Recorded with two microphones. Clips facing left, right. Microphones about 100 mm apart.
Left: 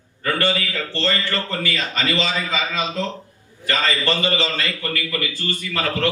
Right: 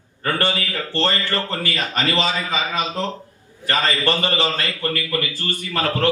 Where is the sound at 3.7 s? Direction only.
45° right (ahead or behind).